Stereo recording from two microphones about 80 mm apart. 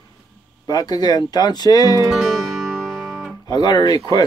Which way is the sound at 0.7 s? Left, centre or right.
Left.